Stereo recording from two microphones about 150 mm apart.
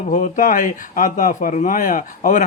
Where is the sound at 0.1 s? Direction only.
60° left (ahead or behind).